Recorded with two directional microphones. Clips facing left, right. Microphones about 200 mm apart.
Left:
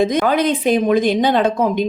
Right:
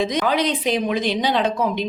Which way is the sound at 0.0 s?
50° left (ahead or behind).